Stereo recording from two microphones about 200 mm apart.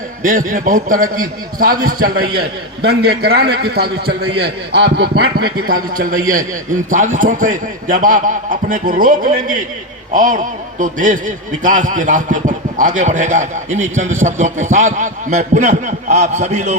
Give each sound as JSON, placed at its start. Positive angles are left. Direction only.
{"t": 0.2, "sound": "a man's voice", "side_deg": -40}